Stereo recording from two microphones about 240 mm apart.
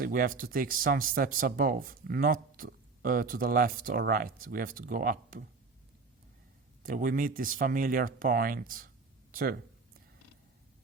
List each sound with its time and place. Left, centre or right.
0.0 s speech: right
6.8 s speech: right